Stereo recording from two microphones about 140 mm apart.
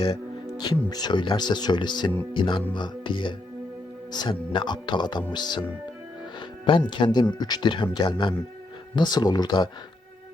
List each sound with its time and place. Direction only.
0.6 s speech: 30° left (ahead or behind)
6.7 s speech: 35° left (ahead or behind)